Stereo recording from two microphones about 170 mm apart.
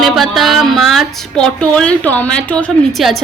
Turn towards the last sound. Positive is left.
turn(degrees=0)  # may be behind; listen again after turning